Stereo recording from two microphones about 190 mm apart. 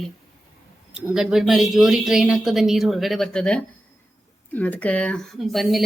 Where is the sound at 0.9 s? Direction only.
5° right (ahead or behind).